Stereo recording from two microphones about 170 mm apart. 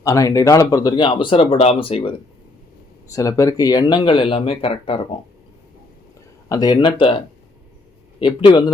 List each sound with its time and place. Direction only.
0.0 s speech: 20° left (ahead or behind)
3.1 s speech: 20° left (ahead or behind)
6.5 s speech: 25° left (ahead or behind)
8.2 s speech: 30° left (ahead or behind)